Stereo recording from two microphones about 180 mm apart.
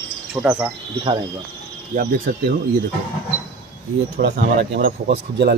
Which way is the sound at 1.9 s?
45° right (ahead or behind).